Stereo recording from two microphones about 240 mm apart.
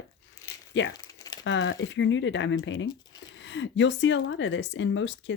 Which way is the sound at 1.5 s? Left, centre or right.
Left.